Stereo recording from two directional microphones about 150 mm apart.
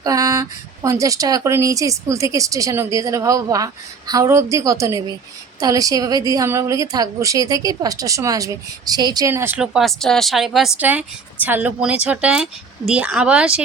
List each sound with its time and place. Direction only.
0.0 s speech: 20° right (ahead or behind)
9.3 s speech: 15° right (ahead or behind)
9.7 s a woman's voice: centre (ahead or behind)